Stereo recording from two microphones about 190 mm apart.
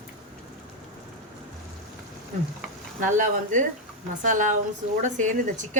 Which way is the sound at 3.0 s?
40° right (ahead or behind).